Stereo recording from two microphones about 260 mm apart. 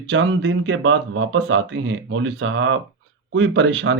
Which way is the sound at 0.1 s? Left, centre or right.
Right.